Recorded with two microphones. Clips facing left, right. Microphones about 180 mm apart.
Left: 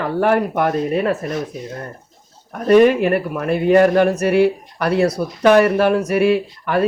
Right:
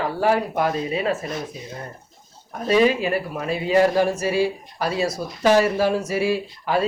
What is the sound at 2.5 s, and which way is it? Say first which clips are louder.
Speech: left 6 dB; 60° left (ahead or behind).